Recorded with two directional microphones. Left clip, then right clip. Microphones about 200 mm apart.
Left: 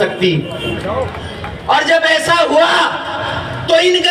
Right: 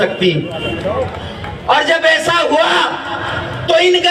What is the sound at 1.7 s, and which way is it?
A man's voice, 25° right (ahead or behind).